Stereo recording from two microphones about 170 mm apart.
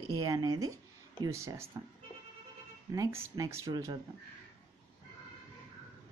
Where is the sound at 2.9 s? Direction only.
20° right (ahead or behind).